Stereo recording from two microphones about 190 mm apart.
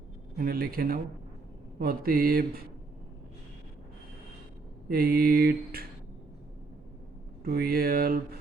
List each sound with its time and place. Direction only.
0.3 s mantra: 50° right (ahead or behind)
4.9 s mantra: 55° right (ahead or behind)
7.4 s mantra: 55° right (ahead or behind)